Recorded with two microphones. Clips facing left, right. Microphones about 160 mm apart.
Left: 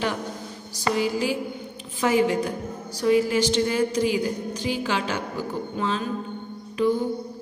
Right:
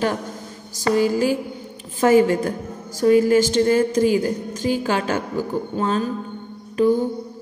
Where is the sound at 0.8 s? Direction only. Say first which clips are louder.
Right 6 dB; 45° right (ahead or behind).